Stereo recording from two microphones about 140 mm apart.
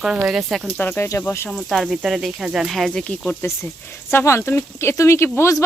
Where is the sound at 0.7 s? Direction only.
15° left (ahead or behind).